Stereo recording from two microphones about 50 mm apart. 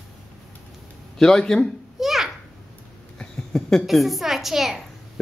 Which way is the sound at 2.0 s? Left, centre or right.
Centre.